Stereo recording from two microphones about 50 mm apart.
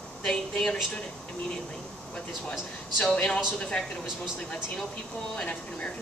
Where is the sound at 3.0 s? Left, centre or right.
Left.